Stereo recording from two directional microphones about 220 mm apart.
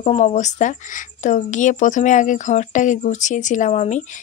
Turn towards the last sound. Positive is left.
turn(degrees=35)  # may be behind; listen again after turning